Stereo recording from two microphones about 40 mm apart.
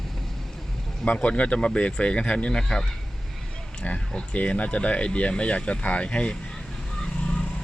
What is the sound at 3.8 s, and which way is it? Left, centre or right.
Speech, left.